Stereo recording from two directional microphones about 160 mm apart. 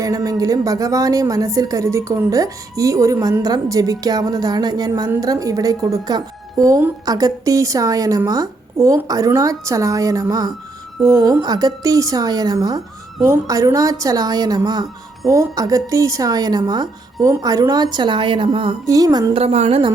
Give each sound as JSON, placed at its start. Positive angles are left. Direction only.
{"t": 0.0, "sound": "a woman's voice", "side_deg": -20}
{"t": 18.9, "sound": "a woman's voice", "side_deg": -20}
{"t": 19.3, "sound": "a woman's voice", "side_deg": -40}